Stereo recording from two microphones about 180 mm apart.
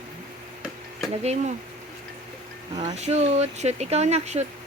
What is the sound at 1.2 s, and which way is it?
Speech, 35° right (ahead or behind).